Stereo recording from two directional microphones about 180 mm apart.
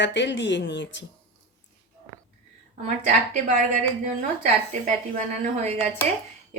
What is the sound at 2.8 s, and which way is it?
A woman's voice, 45° right (ahead or behind).